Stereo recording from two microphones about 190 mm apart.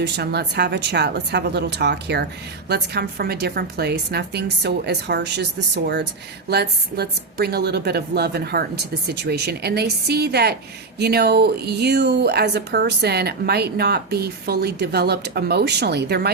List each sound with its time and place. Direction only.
0.0 s speech: 60° right (ahead or behind)